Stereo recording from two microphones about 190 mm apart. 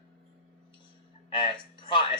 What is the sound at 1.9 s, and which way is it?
Speech, 25° left (ahead or behind).